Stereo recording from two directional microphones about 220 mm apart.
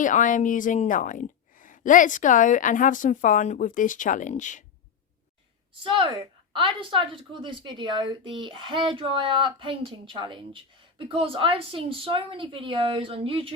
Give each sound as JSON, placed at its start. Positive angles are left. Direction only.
{"t": 0.0, "sound": "a woman's voice", "side_deg": 35}
{"t": 5.8, "sound": "a woman's voice", "side_deg": -25}